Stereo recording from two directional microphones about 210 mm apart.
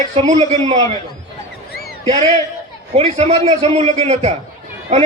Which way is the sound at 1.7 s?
50° left (ahead or behind).